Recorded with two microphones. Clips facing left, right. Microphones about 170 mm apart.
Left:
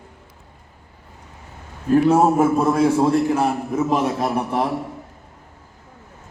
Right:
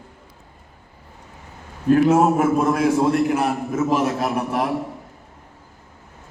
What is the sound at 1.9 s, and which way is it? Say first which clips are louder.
A man's voice: left 1 dB; 30° left (ahead or behind).